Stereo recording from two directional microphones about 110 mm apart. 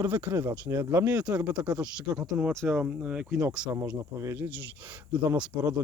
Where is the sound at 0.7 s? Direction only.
35° right (ahead or behind).